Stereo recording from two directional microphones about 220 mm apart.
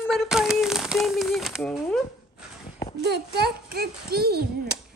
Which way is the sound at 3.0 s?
45° right (ahead or behind).